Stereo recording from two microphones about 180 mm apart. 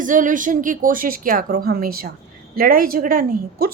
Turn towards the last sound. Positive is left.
turn(degrees=-55)  # may be behind; listen again after turning